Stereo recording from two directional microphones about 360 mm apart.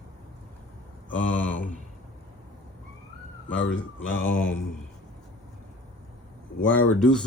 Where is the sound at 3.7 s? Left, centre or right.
Left.